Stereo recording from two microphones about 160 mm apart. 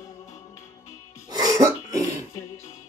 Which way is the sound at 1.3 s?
20° right (ahead or behind).